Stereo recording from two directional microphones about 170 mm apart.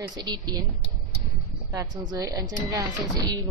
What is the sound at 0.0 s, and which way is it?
A woman's voice, 20° right (ahead or behind).